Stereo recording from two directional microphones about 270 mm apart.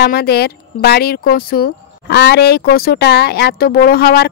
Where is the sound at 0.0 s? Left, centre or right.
Left.